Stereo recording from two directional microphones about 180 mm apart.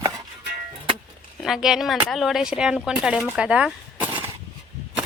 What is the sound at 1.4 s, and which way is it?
Speech, centre (ahead or behind).